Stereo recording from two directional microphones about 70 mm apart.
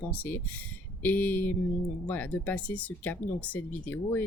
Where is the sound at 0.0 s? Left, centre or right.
Left.